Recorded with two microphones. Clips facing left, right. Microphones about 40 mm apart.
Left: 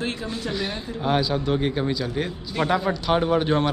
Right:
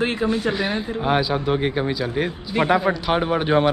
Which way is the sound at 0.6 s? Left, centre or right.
Centre.